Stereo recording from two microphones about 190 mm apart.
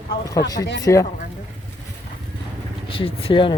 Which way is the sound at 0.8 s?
15° left (ahead or behind).